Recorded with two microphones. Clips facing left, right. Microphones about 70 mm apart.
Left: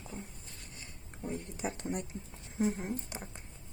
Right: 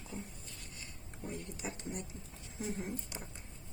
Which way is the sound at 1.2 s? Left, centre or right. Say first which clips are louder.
Left 5 dB; left.